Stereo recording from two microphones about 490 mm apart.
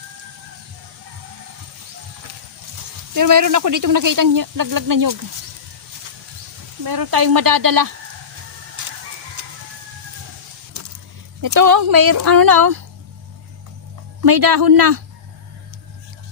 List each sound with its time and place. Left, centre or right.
3.2 s speech: right
6.8 s speech: right
8.8 s music: right
10.8 s a sound: right
11.4 s speech: right
14.3 s speech: right